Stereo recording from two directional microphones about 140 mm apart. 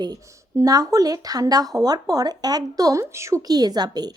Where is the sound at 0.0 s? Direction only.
25° right (ahead or behind).